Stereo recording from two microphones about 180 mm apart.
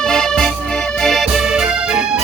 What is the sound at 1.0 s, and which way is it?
Music, centre (ahead or behind).